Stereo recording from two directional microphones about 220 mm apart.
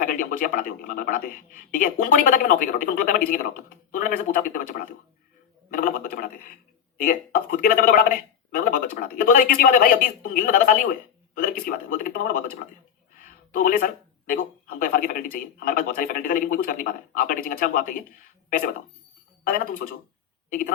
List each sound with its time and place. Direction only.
0.0 s speech: 40° left (ahead or behind)
19.5 s speech: 40° left (ahead or behind)